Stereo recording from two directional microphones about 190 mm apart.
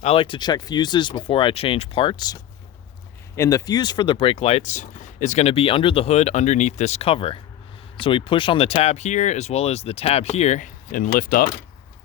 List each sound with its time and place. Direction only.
0.0 s speech: 30° left (ahead or behind); by 11.5 s 50° left (ahead or behind)